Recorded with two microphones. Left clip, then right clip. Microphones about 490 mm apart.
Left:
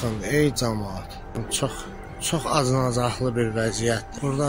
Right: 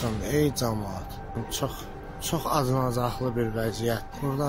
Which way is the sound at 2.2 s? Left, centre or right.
Right.